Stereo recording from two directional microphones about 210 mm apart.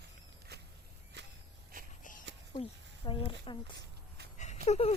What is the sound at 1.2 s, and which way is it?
Walk, 55° right (ahead or behind).